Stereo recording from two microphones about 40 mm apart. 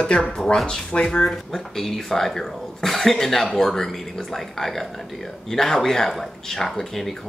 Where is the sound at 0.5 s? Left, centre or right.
Centre.